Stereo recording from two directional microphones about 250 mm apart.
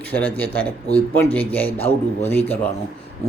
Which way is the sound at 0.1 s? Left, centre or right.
Centre.